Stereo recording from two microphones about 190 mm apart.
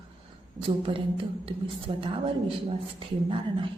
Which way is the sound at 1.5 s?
30° right (ahead or behind).